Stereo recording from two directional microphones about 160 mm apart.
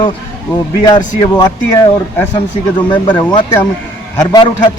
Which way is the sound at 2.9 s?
30° left (ahead or behind).